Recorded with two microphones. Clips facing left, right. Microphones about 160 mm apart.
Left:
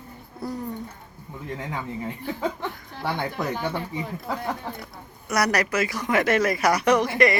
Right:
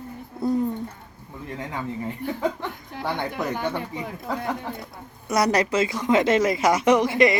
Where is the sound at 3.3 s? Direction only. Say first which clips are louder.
Right 1 dB; 15° right (ahead or behind).